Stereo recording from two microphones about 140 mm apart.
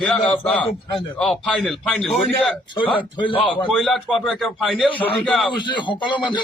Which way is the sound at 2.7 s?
35° left (ahead or behind).